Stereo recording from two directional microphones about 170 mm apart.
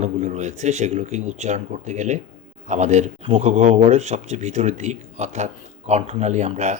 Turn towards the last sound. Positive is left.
turn(degrees=-45)  # may be behind; listen again after turning